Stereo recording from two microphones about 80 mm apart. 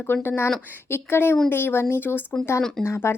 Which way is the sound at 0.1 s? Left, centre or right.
Left.